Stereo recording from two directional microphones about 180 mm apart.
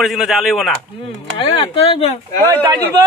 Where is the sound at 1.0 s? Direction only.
30° left (ahead or behind).